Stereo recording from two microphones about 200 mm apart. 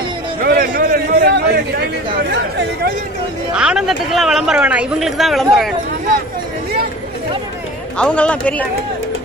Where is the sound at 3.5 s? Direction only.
5° right (ahead or behind).